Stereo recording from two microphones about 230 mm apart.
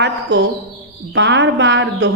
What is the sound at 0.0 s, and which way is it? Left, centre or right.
Speech, right.